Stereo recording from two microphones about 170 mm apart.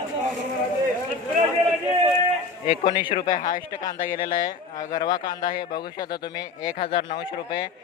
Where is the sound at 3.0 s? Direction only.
30° left (ahead or behind).